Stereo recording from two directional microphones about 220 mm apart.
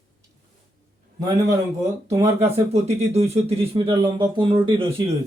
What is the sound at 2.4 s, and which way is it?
Speech, 30° right (ahead or behind).